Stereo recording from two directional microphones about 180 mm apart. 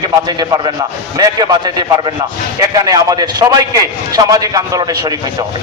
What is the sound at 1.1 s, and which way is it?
A man's voice, 20° right (ahead or behind).